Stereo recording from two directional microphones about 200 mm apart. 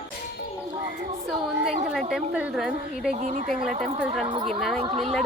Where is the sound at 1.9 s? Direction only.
Centre (ahead or behind).